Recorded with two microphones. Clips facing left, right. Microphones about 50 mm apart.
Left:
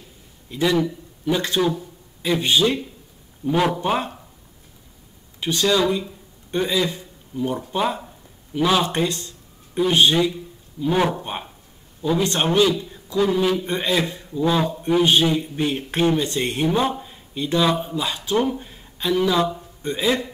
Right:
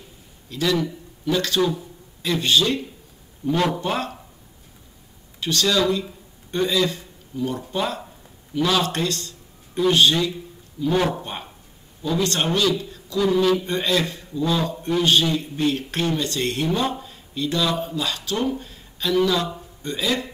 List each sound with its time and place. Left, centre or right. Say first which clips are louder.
0.5 s speech: left 2 dB; left
5.4 s a man's voice: left 1 dB; centre